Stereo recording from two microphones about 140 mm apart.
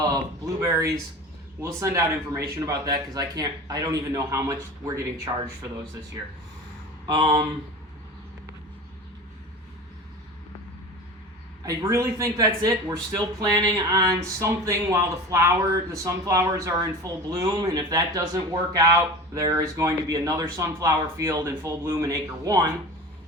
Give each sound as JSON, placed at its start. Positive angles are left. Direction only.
{"t": 0.0, "sound": "a sound", "side_deg": -25}
{"t": 1.6, "sound": "speech", "side_deg": -20}
{"t": 7.1, "sound": "speech", "side_deg": -35}
{"t": 11.6, "sound": "speech", "side_deg": -25}